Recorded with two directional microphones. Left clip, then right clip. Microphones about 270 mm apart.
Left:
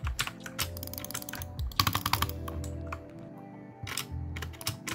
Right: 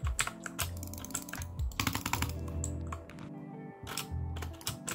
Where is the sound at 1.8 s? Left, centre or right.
Centre.